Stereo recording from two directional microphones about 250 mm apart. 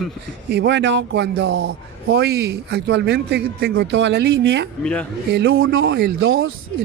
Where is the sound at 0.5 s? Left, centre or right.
Right.